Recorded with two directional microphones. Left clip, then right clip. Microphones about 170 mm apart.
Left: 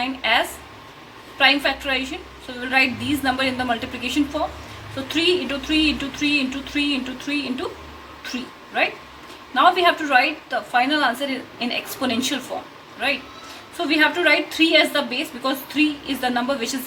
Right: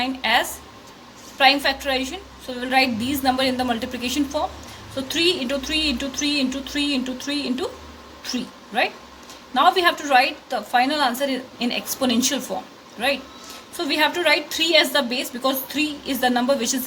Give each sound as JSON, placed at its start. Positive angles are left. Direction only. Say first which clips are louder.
{"t": 0.0, "sound": "a sound", "louder": "even", "side_deg": -65}
{"t": 1.4, "sound": "a woman's voice", "louder": "even", "side_deg": -60}
{"t": 13.7, "sound": "a woman's voice", "louder": "left 2 dB", "side_deg": -60}